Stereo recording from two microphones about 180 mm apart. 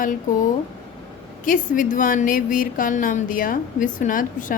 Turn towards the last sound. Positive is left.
turn(degrees=45)  # may be behind; listen again after turning